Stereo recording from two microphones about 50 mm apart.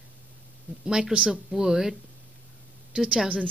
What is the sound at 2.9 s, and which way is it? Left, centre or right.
Speech, centre.